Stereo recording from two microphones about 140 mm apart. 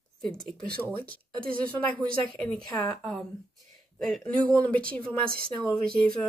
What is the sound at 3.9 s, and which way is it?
Speech, centre (ahead or behind).